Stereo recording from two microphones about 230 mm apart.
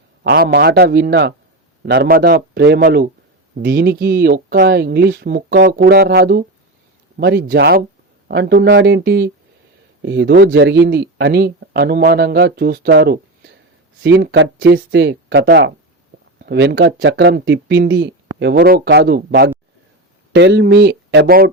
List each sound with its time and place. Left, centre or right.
0.3 s speech: right